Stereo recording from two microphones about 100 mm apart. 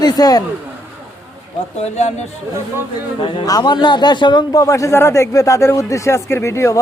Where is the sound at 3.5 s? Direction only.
45° left (ahead or behind).